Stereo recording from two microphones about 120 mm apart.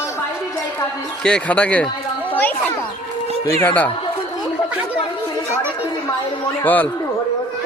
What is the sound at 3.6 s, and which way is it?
Speech, 15° left (ahead or behind).